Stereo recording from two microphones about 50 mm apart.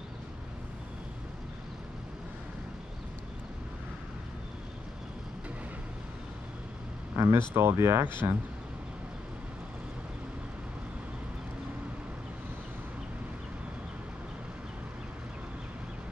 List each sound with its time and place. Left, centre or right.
7.2 s speech: right
8.2 s speech: right